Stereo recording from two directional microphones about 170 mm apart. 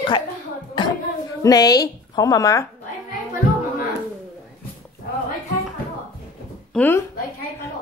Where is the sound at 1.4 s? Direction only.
20° left (ahead or behind).